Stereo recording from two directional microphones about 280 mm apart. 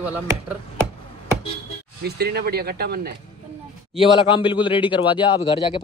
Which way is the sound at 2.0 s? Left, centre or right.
Right.